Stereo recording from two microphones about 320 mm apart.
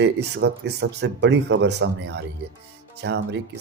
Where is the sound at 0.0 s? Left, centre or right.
Right.